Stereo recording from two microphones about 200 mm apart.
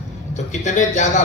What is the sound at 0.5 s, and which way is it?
Speech, 35° left (ahead or behind).